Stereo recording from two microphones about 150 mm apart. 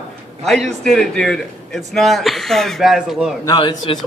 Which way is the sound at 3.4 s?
25° left (ahead or behind).